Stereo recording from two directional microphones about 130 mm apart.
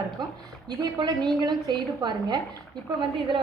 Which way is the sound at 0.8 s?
25° right (ahead or behind).